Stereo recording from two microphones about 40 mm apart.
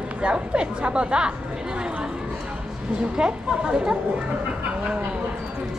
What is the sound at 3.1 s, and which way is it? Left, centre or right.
Speech, right.